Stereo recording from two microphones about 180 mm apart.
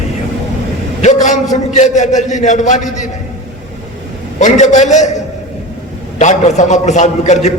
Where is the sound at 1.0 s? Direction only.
45° left (ahead or behind).